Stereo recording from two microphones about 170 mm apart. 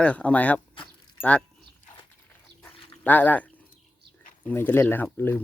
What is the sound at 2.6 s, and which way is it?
Dog, 10° left (ahead or behind).